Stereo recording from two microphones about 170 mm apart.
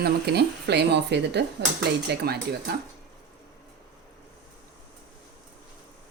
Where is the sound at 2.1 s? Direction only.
75° right (ahead or behind).